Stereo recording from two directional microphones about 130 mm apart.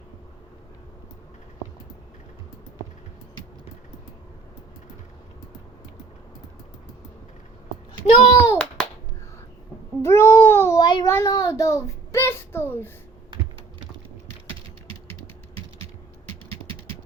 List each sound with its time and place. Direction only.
7.9 s a child's voice: 30° left (ahead or behind)
10.0 s babbling: 20° left (ahead or behind)
10.8 s a sound: 35° left (ahead or behind)
11.0 s a child's voice: 20° left (ahead or behind)